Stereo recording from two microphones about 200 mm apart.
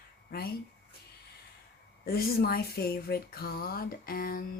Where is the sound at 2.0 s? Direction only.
50° left (ahead or behind).